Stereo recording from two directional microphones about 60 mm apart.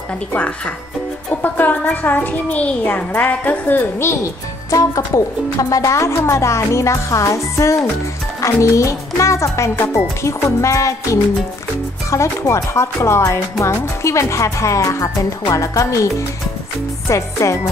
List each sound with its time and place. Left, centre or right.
0.3 s a child's voice: left
4.6 s speech: left